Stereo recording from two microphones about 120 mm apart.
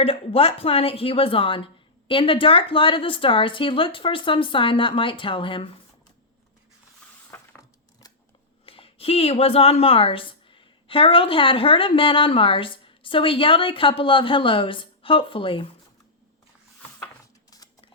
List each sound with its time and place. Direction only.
0.0 s speech: 50° left (ahead or behind)
7.3 s ratchet: 15° left (ahead or behind)
8.6 s a woman's voice: 50° left (ahead or behind)